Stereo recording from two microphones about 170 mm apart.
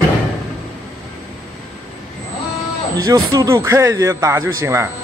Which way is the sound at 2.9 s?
20° right (ahead or behind).